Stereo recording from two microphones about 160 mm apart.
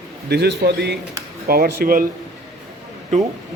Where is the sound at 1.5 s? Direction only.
70° right (ahead or behind).